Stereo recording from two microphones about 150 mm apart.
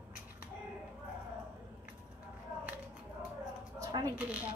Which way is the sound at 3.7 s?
25° right (ahead or behind).